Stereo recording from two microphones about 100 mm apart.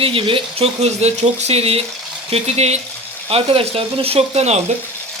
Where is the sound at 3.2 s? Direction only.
75° right (ahead or behind); by 4.6 s 90° right.